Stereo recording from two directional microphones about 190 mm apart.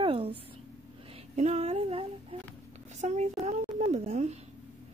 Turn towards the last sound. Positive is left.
turn(degrees=-35)  # may be behind; listen again after turning